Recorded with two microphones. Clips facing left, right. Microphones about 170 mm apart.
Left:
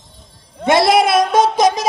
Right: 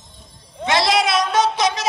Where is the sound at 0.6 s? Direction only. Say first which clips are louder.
Left 6 dB; 55° left (ahead or behind).